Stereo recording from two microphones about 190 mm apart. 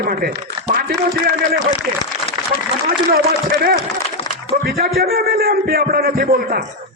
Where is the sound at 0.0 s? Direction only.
55° right (ahead or behind).